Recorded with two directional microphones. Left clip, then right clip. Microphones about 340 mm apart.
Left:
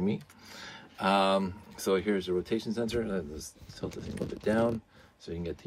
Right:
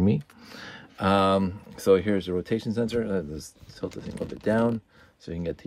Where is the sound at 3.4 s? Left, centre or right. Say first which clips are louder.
Right 2 dB; right.